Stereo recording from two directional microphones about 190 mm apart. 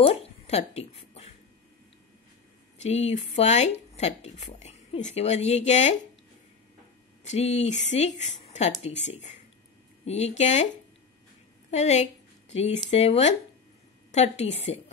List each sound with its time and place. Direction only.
0.0 s a sound: 30° left (ahead or behind)
2.8 s speech: 35° left (ahead or behind)
7.2 s speech: 35° left (ahead or behind)
11.7 s a woman's voice: 35° left (ahead or behind)